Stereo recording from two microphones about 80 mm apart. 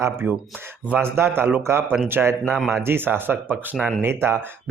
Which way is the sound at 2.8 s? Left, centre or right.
Right.